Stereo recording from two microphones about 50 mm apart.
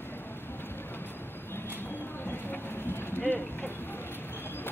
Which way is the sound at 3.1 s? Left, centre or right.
Left.